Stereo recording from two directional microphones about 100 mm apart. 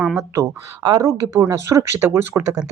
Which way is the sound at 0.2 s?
30° right (ahead or behind).